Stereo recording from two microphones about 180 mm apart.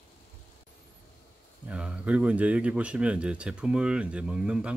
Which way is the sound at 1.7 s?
5° right (ahead or behind).